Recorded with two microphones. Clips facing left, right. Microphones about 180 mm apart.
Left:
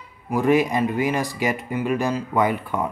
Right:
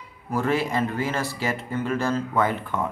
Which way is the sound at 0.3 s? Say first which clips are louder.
Left 5 dB; 15° left (ahead or behind).